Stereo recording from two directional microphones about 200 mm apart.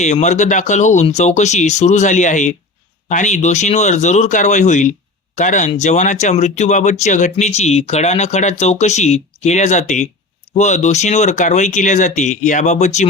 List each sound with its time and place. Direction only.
0.0 s speech: 35° left (ahead or behind)